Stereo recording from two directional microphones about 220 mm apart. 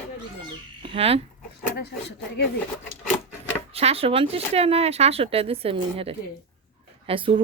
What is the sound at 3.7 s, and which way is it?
Speech, 25° right (ahead or behind).